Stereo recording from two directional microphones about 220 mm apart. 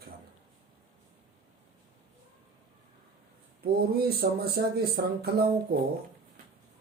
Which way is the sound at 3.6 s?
45° right (ahead or behind).